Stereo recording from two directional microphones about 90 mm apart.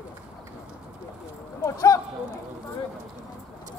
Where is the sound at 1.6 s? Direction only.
40° left (ahead or behind).